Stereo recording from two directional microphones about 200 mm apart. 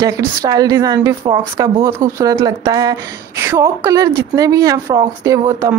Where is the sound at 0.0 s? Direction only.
20° right (ahead or behind).